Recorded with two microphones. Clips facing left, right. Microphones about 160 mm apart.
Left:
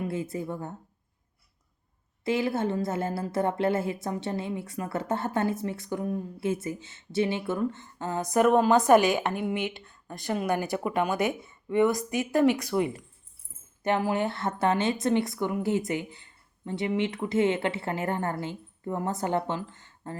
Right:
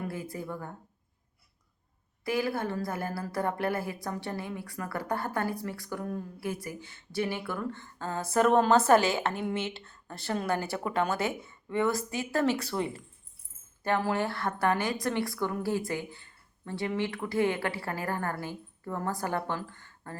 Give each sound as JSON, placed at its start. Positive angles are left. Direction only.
{"t": 0.0, "sound": "a woman's voice", "side_deg": 20}
{"t": 2.2, "sound": "a woman's voice", "side_deg": 25}